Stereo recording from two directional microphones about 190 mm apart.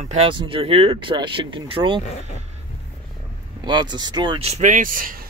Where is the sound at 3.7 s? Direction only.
20° right (ahead or behind); by 5.2 s 45° right (ahead or behind).